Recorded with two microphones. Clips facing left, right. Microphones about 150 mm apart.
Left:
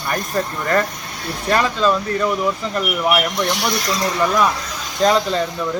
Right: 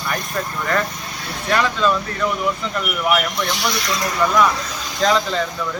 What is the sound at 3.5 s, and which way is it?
Speech, 55° left (ahead or behind).